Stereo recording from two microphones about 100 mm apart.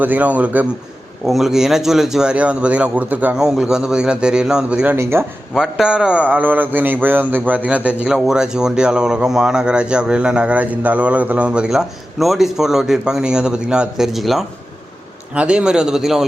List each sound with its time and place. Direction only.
0.0 s a man's voice: 15° right (ahead or behind)
1.3 s a man's voice: 5° right (ahead or behind)
3.4 s a man's voice: 5° right (ahead or behind)
4.9 s speech: 25° right (ahead or behind)
5.5 s a man's voice: 5° right (ahead or behind)